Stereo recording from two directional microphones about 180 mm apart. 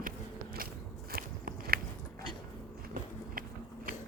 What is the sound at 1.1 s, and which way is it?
Biting, 55° right (ahead or behind).